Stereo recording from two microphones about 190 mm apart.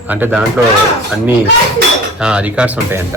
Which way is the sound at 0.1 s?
10° right (ahead or behind).